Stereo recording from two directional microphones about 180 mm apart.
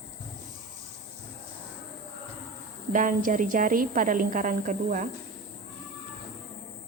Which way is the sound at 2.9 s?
45° right (ahead or behind).